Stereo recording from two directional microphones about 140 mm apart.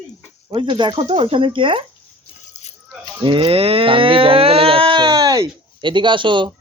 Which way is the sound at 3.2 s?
35° right (ahead or behind).